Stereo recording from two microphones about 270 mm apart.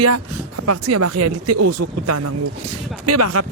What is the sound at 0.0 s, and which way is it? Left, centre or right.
Speech, right.